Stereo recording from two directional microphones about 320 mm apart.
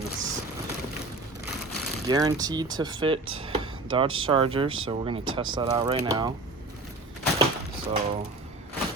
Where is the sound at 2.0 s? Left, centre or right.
Centre.